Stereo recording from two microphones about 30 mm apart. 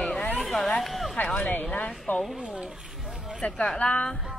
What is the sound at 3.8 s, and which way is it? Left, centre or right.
Speech, left.